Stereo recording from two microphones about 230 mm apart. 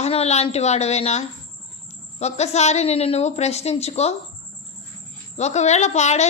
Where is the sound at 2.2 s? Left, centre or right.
Left.